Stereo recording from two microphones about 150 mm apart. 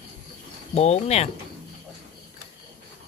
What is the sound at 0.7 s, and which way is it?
Speech, 45° left (ahead or behind).